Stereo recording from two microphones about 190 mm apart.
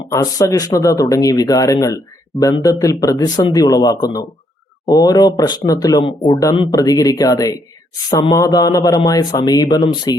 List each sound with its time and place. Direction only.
0.1 s speech: 15° left (ahead or behind)